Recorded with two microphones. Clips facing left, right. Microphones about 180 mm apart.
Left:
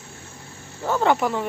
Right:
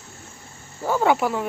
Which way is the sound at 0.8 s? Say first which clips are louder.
Even; 5° right (ahead or behind).